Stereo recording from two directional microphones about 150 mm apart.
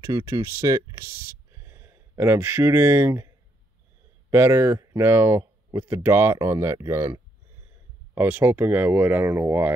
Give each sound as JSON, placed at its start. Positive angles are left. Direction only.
{"t": 0.0, "sound": "speech", "side_deg": -25}
{"t": 4.3, "sound": "speech", "side_deg": -15}